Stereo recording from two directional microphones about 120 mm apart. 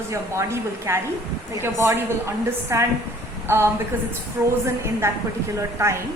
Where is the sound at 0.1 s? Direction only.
25° right (ahead or behind).